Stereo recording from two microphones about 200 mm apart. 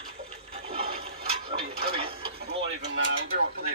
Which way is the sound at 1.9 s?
30° right (ahead or behind).